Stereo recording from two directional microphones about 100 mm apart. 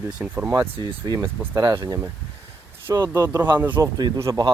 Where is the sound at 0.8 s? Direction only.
45° right (ahead or behind); by 3.4 s 25° right (ahead or behind).